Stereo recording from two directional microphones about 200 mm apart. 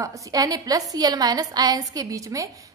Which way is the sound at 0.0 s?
15° right (ahead or behind).